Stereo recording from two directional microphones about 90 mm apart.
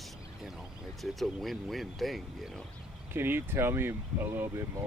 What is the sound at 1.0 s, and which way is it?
Speech, centre (ahead or behind).